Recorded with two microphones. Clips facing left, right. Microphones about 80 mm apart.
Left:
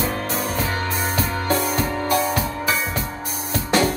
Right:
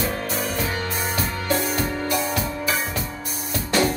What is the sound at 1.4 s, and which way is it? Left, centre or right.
Music, left.